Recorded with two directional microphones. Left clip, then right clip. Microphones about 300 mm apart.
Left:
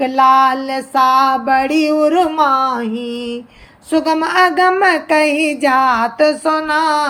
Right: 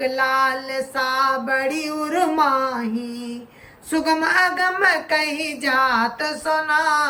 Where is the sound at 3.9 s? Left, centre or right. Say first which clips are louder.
Left 4 dB; centre.